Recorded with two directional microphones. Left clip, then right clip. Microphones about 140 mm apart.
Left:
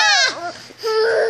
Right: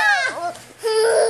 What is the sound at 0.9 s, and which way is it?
Baby cry, 35° right (ahead or behind).